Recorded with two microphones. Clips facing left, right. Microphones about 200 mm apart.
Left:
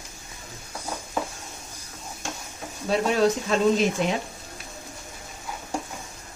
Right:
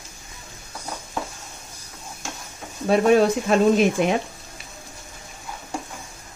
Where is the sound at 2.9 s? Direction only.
55° right (ahead or behind).